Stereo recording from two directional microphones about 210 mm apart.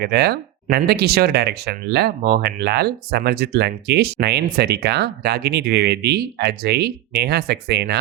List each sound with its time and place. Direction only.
0.0 s speech: 50° right (ahead or behind)